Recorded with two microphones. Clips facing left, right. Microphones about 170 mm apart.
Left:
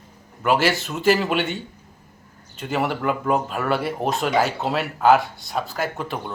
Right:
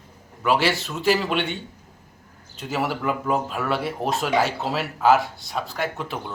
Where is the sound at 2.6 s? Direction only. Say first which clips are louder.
Left 2 dB; centre (ahead or behind).